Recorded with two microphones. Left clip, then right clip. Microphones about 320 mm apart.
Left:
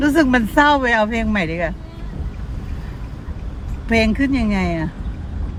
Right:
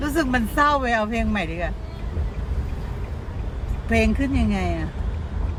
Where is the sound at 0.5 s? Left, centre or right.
Left.